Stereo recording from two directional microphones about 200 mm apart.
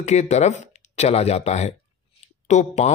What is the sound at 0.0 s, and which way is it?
Speech, 35° left (ahead or behind).